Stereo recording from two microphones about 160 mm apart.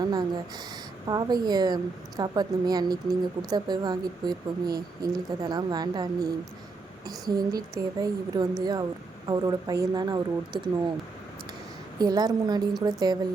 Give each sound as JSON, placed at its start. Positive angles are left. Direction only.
{"t": 0.0, "sound": "a woman's voice", "side_deg": -25}
{"t": 11.9, "sound": "a woman's voice", "side_deg": -25}